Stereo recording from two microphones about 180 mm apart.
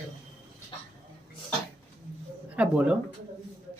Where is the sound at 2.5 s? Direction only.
5° right (ahead or behind).